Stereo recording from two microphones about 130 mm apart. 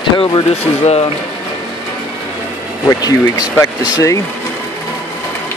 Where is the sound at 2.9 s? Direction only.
30° left (ahead or behind).